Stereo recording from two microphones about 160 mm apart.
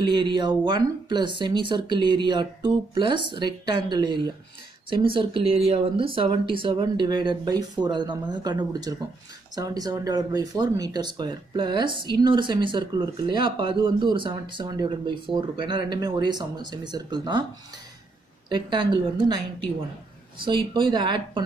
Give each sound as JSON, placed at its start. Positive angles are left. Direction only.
{"t": 0.0, "sound": "speech", "side_deg": -30}
{"t": 18.5, "sound": "speech", "side_deg": -30}